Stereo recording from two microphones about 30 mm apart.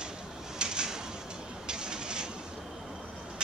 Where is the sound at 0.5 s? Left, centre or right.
Right.